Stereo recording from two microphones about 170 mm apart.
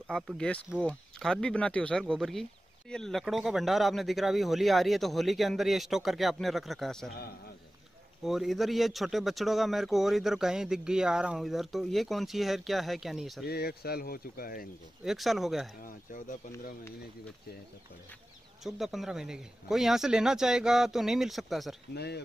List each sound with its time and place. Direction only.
0.1 s a man's voice: 5° left (ahead or behind)
8.2 s a man's voice: centre (ahead or behind)
13.5 s speech: 65° left (ahead or behind)
15.0 s a man's voice: centre (ahead or behind)
15.8 s speech: 50° left (ahead or behind)
18.6 s a man's voice: centre (ahead or behind)
21.9 s speech: 75° left (ahead or behind)